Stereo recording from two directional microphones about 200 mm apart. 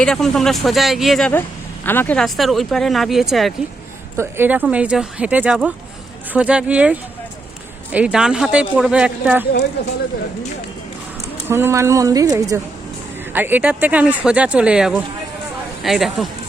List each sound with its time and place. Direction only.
0.0 s speech: centre (ahead or behind)
1.3 s speech: 10° left (ahead or behind); by 9.5 s 5° right (ahead or behind)
11.4 s speech: 10° right (ahead or behind)